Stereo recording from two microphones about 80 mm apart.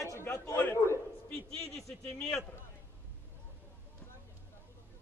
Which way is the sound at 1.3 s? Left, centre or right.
Centre.